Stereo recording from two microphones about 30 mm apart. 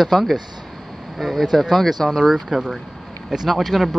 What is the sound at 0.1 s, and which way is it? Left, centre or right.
Speech, centre.